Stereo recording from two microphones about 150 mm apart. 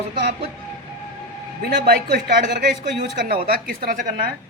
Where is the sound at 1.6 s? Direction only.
90° right.